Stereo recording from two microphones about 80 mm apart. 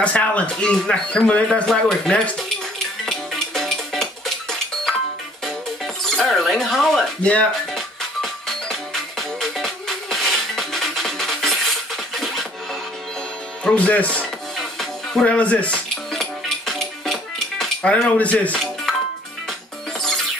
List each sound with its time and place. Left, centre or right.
0.0 s speech: centre
3.1 s music: centre
6.0 s a sound: centre
7.7 s music: centre
13.7 s speech: centre
14.6 s music: centre
15.2 s speech: centre
16.1 s music: centre
17.8 s speech: centre
20.0 s music: centre